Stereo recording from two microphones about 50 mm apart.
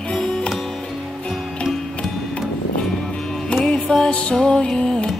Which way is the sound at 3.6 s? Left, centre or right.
Centre.